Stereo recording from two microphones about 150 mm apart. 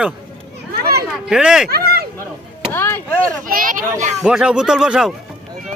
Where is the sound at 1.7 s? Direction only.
90° right.